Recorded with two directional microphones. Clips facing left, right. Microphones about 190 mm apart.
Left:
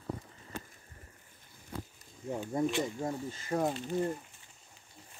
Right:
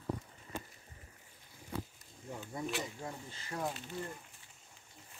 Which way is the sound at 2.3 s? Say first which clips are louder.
Left 8 dB; 45° left (ahead or behind).